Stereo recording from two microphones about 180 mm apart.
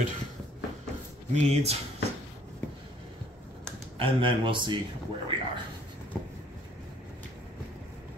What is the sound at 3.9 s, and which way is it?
Speech, 30° right (ahead or behind).